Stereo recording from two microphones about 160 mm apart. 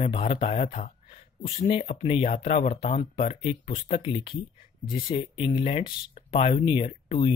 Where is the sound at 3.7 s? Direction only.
30° left (ahead or behind).